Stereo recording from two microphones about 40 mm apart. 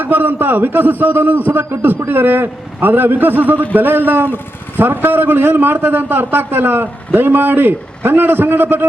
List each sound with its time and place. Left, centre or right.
0.0 s a man's voice: right